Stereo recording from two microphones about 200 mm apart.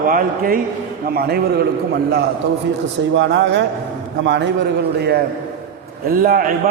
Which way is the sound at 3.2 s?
65° right (ahead or behind).